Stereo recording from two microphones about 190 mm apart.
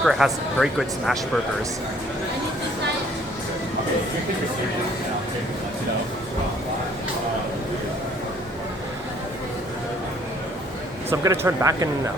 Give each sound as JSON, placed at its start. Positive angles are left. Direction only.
{"t": 0.0, "sound": "speech", "side_deg": 0}
{"t": 11.1, "sound": "speech", "side_deg": -15}